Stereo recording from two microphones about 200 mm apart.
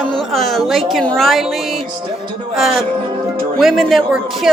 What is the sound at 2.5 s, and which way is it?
A woman's voice, centre (ahead or behind).